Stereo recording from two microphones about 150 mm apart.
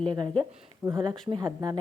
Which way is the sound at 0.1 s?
30° right (ahead or behind).